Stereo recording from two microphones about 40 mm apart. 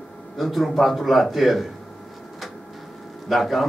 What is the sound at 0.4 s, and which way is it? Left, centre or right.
Speech, centre.